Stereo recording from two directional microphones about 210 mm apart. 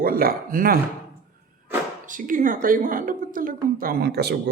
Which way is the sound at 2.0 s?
40° right (ahead or behind).